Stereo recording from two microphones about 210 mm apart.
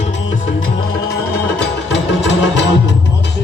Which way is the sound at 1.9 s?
60° left (ahead or behind).